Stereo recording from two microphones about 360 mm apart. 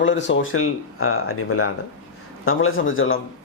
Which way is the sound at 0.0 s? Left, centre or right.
Left.